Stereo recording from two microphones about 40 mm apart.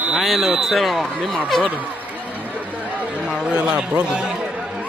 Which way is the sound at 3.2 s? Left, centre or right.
Right.